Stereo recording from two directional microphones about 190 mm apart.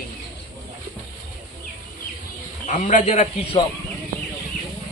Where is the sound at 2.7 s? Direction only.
40° left (ahead or behind).